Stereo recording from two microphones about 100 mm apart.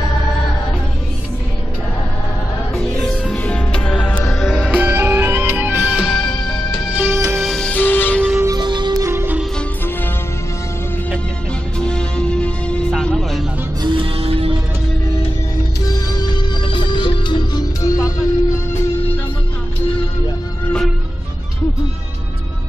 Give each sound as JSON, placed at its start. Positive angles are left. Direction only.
{"t": 2.7, "sound": "music", "side_deg": 5}
{"t": 4.6, "sound": "music", "side_deg": -20}
{"t": 6.1, "sound": "music", "side_deg": 5}
{"t": 7.1, "sound": "music", "side_deg": -25}
{"t": 7.4, "sound": "music", "side_deg": 5}
{"t": 7.7, "sound": "music", "side_deg": 20}
{"t": 8.5, "sound": "music", "side_deg": -50}
{"t": 8.9, "sound": "music", "side_deg": -30}
{"t": 11.8, "sound": "music", "side_deg": 10}
{"t": 13.8, "sound": "music", "side_deg": -70}
{"t": 15.9, "sound": "music", "side_deg": 45}